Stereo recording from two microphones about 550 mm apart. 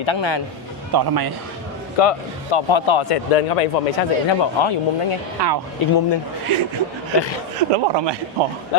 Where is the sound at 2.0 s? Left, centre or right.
Left.